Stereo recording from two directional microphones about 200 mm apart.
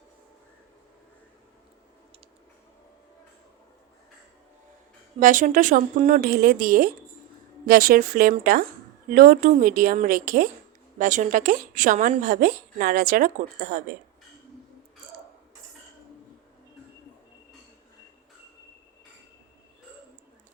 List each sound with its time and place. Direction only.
5.2 s speech: 40° right (ahead or behind)